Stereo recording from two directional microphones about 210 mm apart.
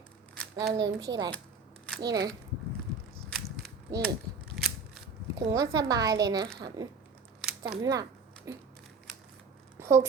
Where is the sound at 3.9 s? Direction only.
15° right (ahead or behind).